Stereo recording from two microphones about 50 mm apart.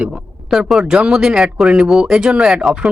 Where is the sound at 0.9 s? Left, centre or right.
Centre.